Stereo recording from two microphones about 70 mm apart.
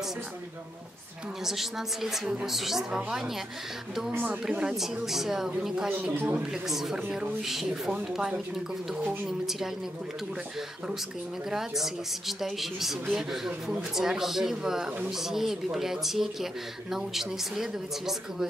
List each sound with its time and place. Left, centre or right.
1.4 s a man's voice: centre
4.1 s speech: right
4.5 s speech: centre
6.1 s speech: right
6.5 s speech: centre
11.5 s a man's voice: centre